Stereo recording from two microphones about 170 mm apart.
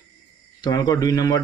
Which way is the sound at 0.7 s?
20° left (ahead or behind).